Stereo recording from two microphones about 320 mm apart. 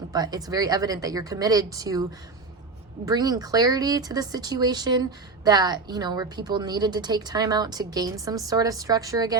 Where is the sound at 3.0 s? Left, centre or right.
Centre.